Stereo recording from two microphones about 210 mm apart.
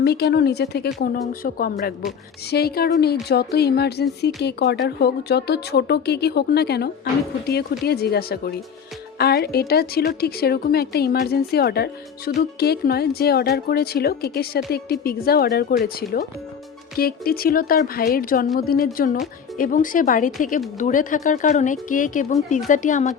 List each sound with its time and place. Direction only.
0.0 s speech: 55° left (ahead or behind); by 23.1 s 35° left (ahead or behind)